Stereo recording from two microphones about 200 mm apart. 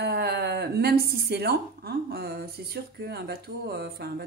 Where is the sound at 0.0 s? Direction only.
55° right (ahead or behind).